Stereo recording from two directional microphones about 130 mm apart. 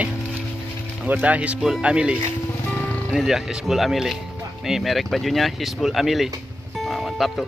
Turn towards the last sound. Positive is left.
turn(degrees=0)  # may be behind; listen again after turning